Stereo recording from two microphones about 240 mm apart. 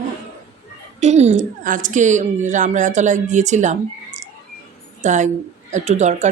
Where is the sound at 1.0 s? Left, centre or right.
Right.